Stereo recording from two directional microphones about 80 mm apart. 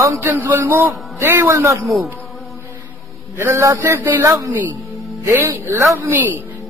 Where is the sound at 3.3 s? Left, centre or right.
Right.